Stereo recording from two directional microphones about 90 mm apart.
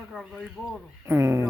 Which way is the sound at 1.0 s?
30° right (ahead or behind).